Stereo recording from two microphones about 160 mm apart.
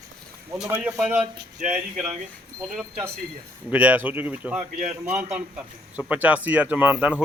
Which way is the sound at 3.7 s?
10° right (ahead or behind).